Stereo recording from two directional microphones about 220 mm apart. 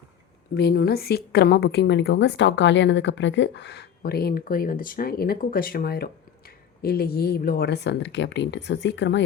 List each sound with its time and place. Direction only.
0.5 s speech: 45° left (ahead or behind)